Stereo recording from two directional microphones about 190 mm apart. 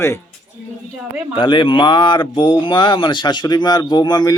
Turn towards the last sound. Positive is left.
turn(degrees=20)  # may be behind; listen again after turning